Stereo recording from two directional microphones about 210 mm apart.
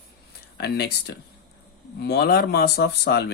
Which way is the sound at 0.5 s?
50° left (ahead or behind).